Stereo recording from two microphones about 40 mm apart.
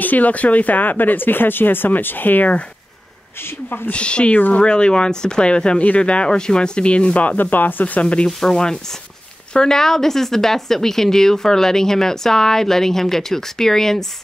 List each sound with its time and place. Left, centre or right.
0.0 s speech: left
3.9 s speech: left
4.3 s speech: left
4.6 s speech: left
5.8 s speech: left
7.3 s speech: left
8.3 s a woman's voice: centre